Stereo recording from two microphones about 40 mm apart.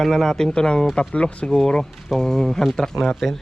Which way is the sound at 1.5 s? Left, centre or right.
Centre.